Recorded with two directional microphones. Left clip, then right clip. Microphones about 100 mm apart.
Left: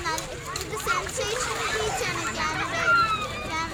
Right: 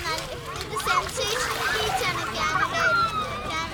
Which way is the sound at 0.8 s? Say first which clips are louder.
Right 3 dB; 15° left (ahead or behind).